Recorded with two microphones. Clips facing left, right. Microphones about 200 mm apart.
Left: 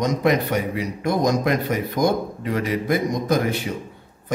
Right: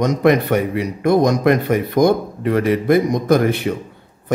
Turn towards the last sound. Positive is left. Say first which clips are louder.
# right 6 dB
turn(degrees=-60)  # may be behind; listen again after turning